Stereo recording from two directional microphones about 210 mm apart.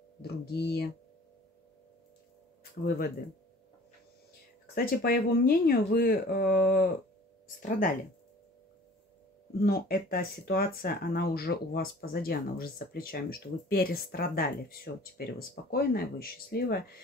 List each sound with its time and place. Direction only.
0.2 s speech: 50° left (ahead or behind)
2.8 s speech: 50° left (ahead or behind)
4.7 s speech: 45° left (ahead or behind)
9.6 s speech: 45° left (ahead or behind)